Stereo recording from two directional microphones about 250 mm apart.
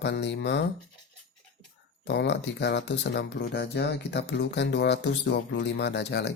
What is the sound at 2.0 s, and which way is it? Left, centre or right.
Speech, left.